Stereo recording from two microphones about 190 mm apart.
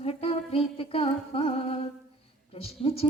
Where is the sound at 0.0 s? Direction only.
30° left (ahead or behind).